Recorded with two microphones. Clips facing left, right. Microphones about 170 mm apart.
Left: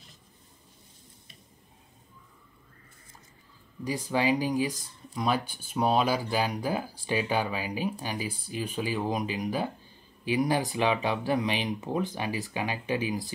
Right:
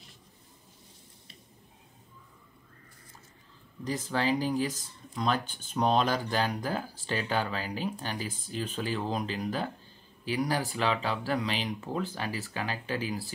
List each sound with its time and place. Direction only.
3.8 s speech: 10° left (ahead or behind)